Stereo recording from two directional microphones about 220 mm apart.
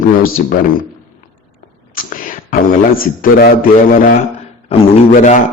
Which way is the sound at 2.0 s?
40° left (ahead or behind).